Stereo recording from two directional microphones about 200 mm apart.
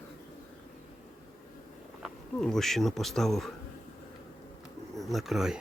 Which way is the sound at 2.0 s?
Centre (ahead or behind).